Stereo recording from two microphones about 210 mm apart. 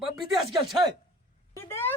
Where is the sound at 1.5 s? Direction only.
10° left (ahead or behind).